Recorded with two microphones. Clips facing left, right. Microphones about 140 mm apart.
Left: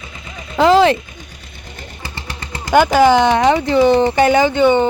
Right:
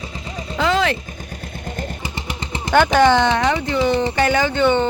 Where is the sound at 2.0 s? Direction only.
20° right (ahead or behind).